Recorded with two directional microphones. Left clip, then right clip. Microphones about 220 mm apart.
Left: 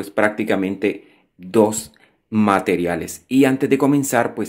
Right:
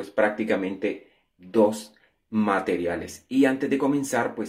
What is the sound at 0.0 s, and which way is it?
Speech, 45° left (ahead or behind).